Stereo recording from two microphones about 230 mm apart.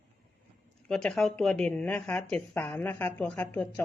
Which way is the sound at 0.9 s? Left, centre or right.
Centre.